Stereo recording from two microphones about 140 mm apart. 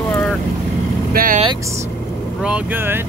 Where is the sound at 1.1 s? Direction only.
90° right.